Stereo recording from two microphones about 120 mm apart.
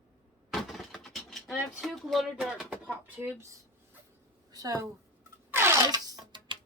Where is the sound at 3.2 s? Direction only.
20° right (ahead or behind).